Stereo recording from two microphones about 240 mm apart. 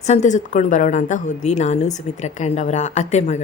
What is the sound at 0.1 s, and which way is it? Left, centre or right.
Speech, left.